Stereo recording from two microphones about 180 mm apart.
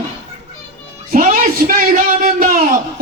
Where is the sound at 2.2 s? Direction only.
50° right (ahead or behind).